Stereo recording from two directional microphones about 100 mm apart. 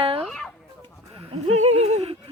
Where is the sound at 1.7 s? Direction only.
90° right.